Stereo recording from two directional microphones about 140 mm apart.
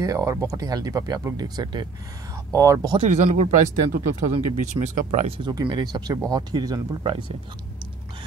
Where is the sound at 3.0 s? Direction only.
55° right (ahead or behind).